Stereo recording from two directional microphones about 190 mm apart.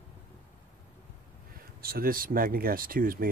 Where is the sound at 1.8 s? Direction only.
50° right (ahead or behind).